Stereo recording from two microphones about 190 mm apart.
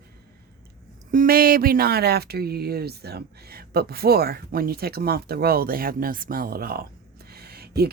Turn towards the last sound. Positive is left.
turn(degrees=-55)  # may be behind; listen again after turning